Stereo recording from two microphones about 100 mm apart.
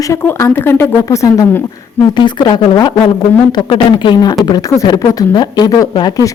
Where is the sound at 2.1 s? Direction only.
50° left (ahead or behind).